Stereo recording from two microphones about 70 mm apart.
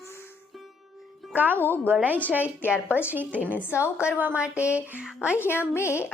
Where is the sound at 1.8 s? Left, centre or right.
Right.